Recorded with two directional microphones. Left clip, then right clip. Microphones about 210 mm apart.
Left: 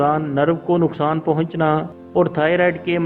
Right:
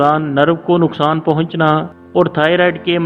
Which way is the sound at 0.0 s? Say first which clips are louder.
Right 5 dB; 45° right (ahead or behind).